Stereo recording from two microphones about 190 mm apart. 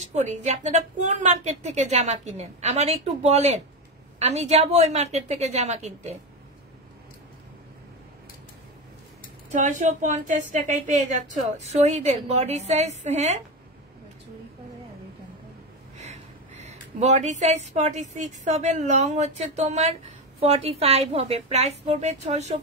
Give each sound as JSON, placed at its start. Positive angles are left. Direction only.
{"t": 0.0, "sound": "a woman's voice", "side_deg": -40}
{"t": 9.5, "sound": "a woman's voice", "side_deg": -40}
{"t": 16.0, "sound": "a woman's voice", "side_deg": -35}